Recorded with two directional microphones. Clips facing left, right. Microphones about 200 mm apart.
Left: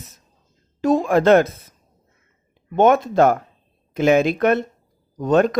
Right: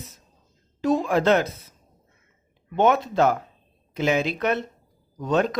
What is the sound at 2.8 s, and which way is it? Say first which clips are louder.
Speech: left 5 dB; 50° left (ahead or behind).